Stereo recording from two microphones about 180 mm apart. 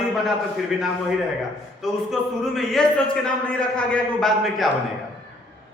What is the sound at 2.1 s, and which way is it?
A man's voice, centre (ahead or behind).